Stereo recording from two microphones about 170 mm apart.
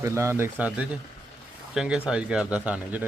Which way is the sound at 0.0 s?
15° right (ahead or behind).